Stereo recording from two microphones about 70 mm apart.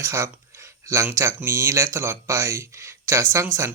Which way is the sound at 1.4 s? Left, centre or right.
Right.